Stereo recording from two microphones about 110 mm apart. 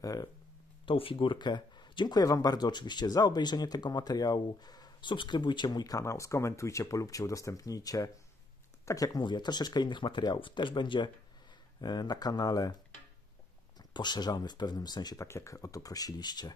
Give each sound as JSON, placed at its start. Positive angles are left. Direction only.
{"t": 0.0, "sound": "speech", "side_deg": 35}
{"t": 0.8, "sound": "speech", "side_deg": 55}
{"t": 13.7, "sound": "speech", "side_deg": 40}
{"t": 15.2, "sound": "speech", "side_deg": 25}